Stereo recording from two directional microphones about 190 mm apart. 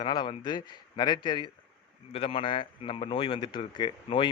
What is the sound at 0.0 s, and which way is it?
A man's voice, 25° left (ahead or behind).